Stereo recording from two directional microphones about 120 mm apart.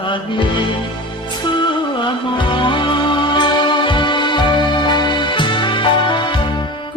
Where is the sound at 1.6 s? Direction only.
45° left (ahead or behind).